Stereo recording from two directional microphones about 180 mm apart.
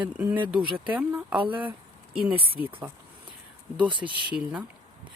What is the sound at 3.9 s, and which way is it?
Speech, 25° right (ahead or behind).